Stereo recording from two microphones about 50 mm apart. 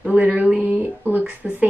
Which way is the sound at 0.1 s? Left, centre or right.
Right.